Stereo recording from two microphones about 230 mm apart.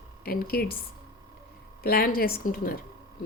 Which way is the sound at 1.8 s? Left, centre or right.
Left.